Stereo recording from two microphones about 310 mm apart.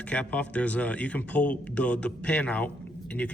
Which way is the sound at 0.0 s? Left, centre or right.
Centre.